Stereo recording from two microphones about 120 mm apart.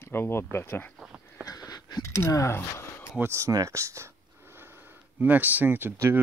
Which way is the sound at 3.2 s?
25° right (ahead or behind).